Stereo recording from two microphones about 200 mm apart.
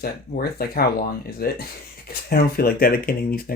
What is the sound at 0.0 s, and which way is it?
Speech, 50° left (ahead or behind).